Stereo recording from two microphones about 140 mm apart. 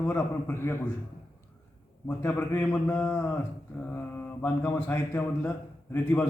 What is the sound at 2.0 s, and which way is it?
A man's voice, 15° left (ahead or behind).